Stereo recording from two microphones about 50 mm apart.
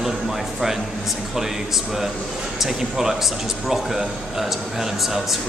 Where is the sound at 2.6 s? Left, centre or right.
Centre.